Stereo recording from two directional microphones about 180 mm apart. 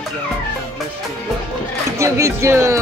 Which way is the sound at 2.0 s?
15° right (ahead or behind).